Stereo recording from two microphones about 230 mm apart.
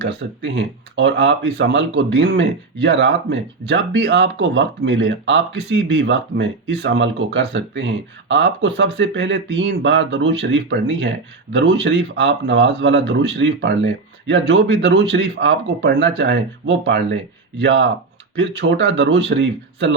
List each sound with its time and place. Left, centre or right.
0.0 s speech: right